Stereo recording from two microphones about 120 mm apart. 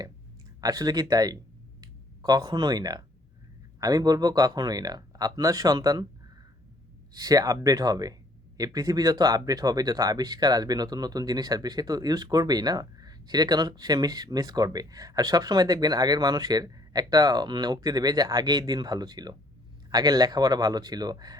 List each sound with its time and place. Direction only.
0.6 s speech: 30° right (ahead or behind)
7.1 s speech: 30° right (ahead or behind)